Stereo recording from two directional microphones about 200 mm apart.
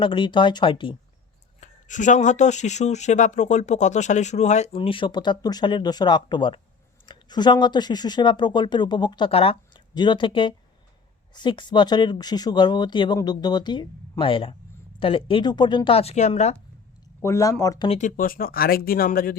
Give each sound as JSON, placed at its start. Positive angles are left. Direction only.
{"t": 0.0, "sound": "speech", "side_deg": 25}
{"t": 1.6, "sound": "speech", "side_deg": 40}
{"t": 17.2, "sound": "speech", "side_deg": 15}
{"t": 17.8, "sound": "speech", "side_deg": 35}